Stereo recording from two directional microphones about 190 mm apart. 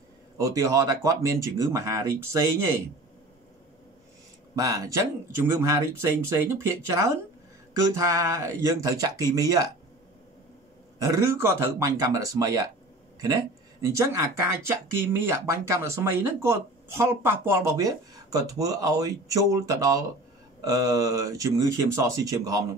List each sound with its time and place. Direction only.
0.4 s speech: 15° right (ahead or behind)
4.6 s speech: 15° right (ahead or behind)
11.0 s speech: 15° right (ahead or behind)